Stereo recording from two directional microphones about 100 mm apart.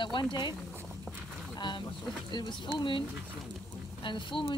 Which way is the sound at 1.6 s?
50° left (ahead or behind).